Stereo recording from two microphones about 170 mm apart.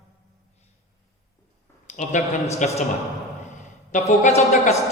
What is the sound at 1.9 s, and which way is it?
Speech, 45° left (ahead or behind).